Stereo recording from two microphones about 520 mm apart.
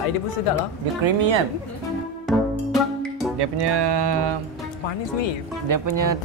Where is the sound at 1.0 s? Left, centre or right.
Right.